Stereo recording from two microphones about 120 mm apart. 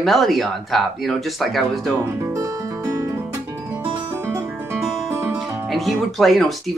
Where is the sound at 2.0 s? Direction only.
25° right (ahead or behind).